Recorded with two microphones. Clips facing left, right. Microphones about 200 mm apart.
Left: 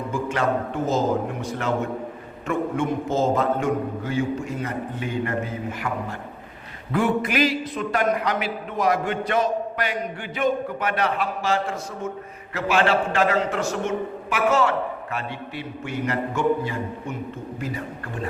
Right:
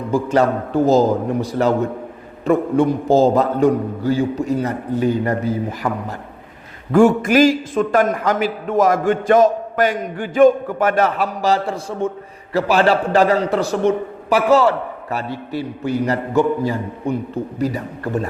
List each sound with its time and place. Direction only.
0.1 s a man's voice: 35° right (ahead or behind)